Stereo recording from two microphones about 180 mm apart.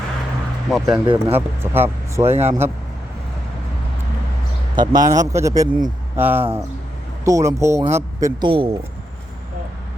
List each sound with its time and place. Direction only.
0.7 s speech: 5° right (ahead or behind)
4.7 s a man's voice: 25° right (ahead or behind)
8.4 s a man's voice: 30° right (ahead or behind)